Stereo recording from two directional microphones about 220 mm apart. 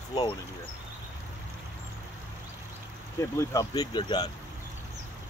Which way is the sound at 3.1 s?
15° left (ahead or behind).